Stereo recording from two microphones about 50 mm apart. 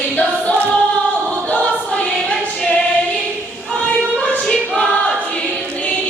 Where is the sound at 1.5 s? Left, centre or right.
Left.